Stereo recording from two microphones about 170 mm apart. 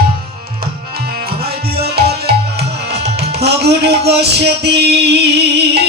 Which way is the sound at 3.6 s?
75° right (ahead or behind).